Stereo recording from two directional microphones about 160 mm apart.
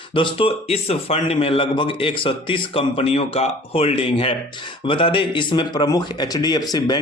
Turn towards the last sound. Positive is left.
turn(degrees=25)  # may be behind; listen again after turning